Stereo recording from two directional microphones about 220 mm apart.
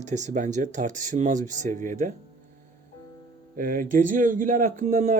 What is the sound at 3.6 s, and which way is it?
Speech, 40° right (ahead or behind).